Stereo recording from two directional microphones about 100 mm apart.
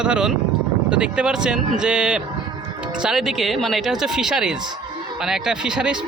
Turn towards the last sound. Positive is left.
turn(degrees=-5)  # may be behind; listen again after turning